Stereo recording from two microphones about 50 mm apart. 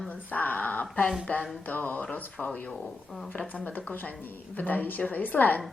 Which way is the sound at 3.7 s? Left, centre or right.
Left.